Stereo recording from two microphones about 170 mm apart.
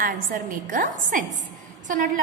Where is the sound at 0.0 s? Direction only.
50° right (ahead or behind).